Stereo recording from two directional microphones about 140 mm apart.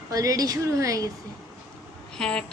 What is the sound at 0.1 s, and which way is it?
A woman's voice, 25° right (ahead or behind).